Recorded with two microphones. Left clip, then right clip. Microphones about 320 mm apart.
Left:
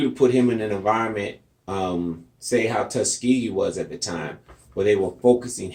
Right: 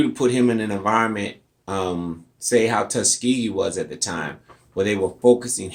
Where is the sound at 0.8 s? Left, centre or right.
Right.